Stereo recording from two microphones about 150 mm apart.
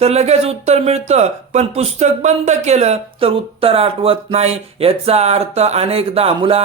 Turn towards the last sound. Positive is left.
turn(degrees=-40)  # may be behind; listen again after turning